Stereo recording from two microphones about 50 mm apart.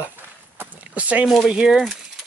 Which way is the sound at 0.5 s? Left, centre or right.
Right.